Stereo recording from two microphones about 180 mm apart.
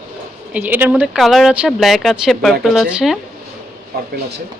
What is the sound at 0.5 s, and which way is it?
A woman's voice, 10° right (ahead or behind).